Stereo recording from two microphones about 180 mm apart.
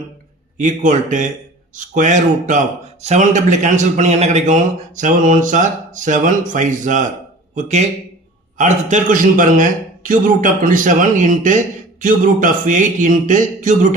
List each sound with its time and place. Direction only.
0.5 s a man's voice: 45° right (ahead or behind)